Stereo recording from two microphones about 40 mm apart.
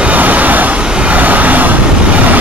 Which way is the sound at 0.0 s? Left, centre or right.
Right.